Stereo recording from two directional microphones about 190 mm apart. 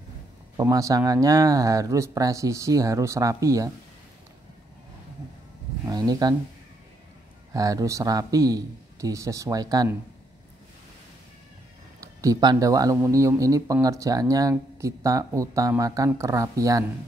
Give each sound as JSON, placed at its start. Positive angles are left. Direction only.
{"t": 0.6, "sound": "speech", "side_deg": -15}
{"t": 5.9, "sound": "speech", "side_deg": -20}
{"t": 7.5, "sound": "speech", "side_deg": -15}
{"t": 12.0, "sound": "speech", "side_deg": -15}